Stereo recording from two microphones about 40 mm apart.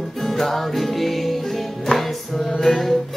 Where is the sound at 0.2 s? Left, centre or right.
Centre.